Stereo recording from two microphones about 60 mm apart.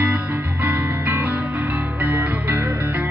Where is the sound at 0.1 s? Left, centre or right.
Right.